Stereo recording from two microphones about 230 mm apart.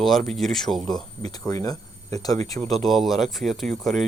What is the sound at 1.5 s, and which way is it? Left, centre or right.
Speech, centre.